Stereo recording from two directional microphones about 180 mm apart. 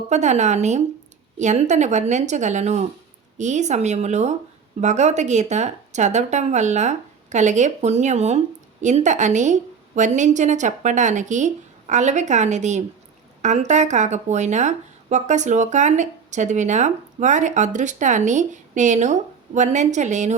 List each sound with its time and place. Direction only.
0.1 s speech: 40° right (ahead or behind)